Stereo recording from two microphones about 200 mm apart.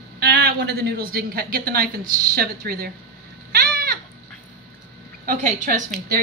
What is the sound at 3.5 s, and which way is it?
Goat, 50° right (ahead or behind).